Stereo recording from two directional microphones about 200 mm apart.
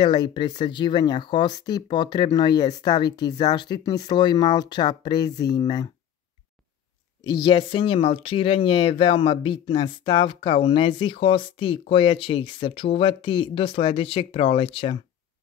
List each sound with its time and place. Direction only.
0.0 s speech: 20° left (ahead or behind)
7.4 s speech: 25° left (ahead or behind)